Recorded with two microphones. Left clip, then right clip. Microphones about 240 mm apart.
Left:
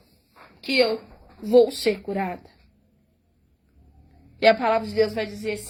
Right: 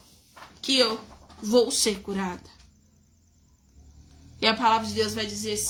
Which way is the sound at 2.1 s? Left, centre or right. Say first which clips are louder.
Left 4 dB; right.